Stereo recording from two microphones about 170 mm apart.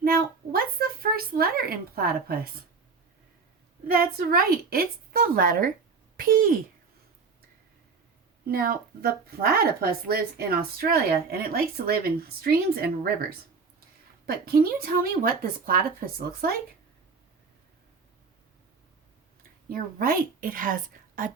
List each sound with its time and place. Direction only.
0.0 s a sound: 60° right (ahead or behind)
3.8 s speech: 60° right (ahead or behind)
8.4 s speech: 60° right (ahead or behind)
14.3 s speech: 60° right (ahead or behind)
19.4 s speech: 60° right (ahead or behind)